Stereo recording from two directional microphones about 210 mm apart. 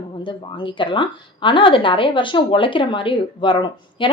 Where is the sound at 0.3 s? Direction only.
25° left (ahead or behind).